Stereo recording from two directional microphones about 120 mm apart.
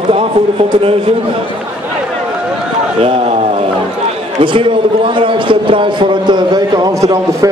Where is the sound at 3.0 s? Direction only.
50° right (ahead or behind).